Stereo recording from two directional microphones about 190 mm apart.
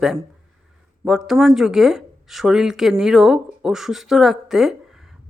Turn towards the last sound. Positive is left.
turn(degrees=0)  # may be behind; listen again after turning